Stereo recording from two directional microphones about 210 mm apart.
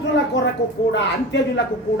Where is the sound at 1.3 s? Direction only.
60° left (ahead or behind).